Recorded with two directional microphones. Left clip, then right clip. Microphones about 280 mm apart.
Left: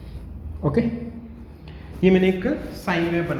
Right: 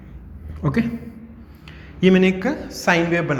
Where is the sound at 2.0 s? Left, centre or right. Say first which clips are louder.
Right 2 dB; right.